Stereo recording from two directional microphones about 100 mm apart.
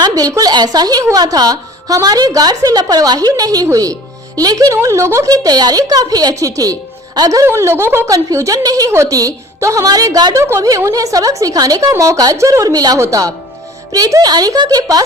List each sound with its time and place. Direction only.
0.0 s a woman's voice: 40° right (ahead or behind)
7.4 s a woman's voice: 25° right (ahead or behind); by 10.3 s 40° right (ahead or behind)
10.3 s a woman's voice: 30° right (ahead or behind)